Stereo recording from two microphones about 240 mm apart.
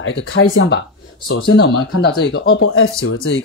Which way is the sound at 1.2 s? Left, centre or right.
Left.